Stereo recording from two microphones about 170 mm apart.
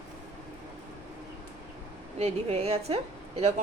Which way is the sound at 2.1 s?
40° right (ahead or behind).